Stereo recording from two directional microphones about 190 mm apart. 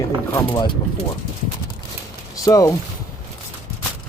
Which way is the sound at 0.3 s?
25° left (ahead or behind).